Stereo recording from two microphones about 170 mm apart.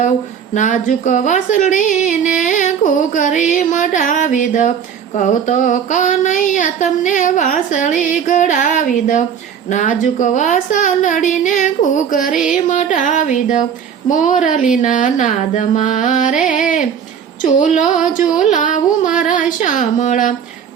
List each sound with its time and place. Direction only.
0.5 s speech: 50° left (ahead or behind)
17.4 s speech: 50° left (ahead or behind)